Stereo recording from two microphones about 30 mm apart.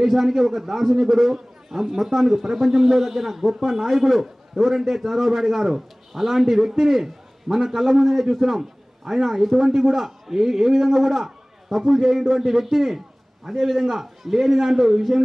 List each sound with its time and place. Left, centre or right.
0.0 s a man's voice: centre